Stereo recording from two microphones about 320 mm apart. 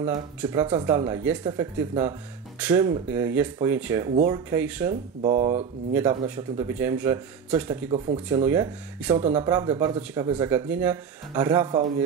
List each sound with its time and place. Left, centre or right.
0.0 s speech: centre
5.2 s speech: centre
5.9 s speech: centre